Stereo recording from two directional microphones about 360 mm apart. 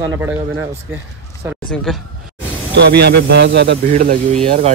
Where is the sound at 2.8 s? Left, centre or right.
Right.